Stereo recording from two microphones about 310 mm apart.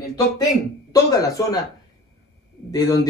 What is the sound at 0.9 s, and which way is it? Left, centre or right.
Speech, centre.